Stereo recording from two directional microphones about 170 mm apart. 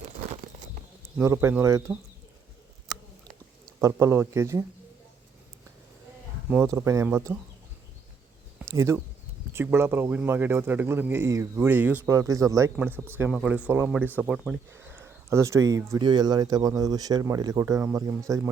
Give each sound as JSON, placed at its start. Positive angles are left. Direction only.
{"t": 1.2, "sound": "speech", "side_deg": -15}
{"t": 3.8, "sound": "speech", "side_deg": -15}
{"t": 6.5, "sound": "speech", "side_deg": -15}
{"t": 8.7, "sound": "speech", "side_deg": -15}